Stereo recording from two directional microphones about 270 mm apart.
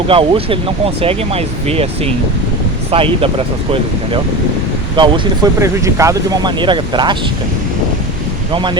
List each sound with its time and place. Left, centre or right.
0.1 s speech: centre
2.9 s speech: right
4.9 s speech: centre
8.5 s speech: centre